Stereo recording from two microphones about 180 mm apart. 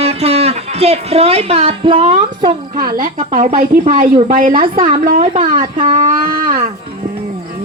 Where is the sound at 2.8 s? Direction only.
50° right (ahead or behind).